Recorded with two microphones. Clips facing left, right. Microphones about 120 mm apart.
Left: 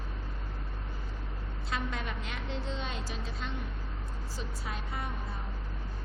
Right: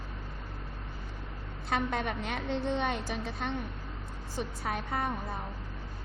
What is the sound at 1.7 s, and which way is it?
A woman's voice, 60° right (ahead or behind).